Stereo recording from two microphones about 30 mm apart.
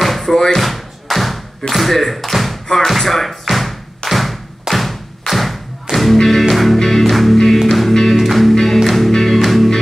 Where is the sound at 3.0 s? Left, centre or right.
Centre.